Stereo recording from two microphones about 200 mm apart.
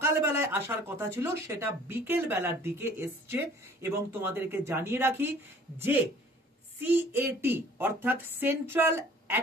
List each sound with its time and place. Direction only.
0.0 s speech: 15° right (ahead or behind)
6.8 s speech: 10° right (ahead or behind)